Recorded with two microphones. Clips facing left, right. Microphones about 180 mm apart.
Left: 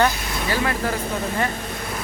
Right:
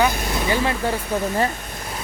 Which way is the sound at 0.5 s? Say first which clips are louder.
Right 1 dB; 25° right (ahead or behind).